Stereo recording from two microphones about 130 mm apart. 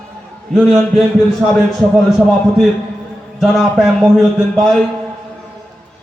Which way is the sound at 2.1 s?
5° right (ahead or behind).